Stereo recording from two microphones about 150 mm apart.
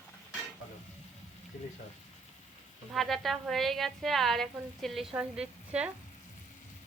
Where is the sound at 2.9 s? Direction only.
Centre (ahead or behind).